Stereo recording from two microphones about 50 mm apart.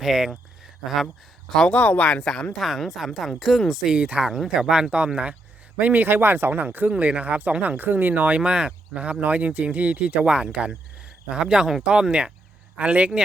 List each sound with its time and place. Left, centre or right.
0.0 s speech: centre
1.7 s speech: left
2.6 s speech: centre
3.8 s speech: right
5.9 s speech: right
8.4 s speech: centre